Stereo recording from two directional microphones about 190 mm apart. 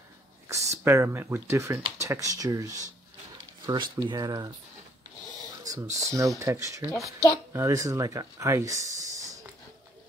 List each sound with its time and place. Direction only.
0.5 s speech: 15° right (ahead or behind)
5.6 s cricket: 20° right (ahead or behind)
5.9 s speech: 15° right (ahead or behind)